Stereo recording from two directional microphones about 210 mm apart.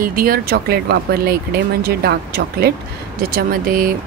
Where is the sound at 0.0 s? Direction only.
45° right (ahead or behind).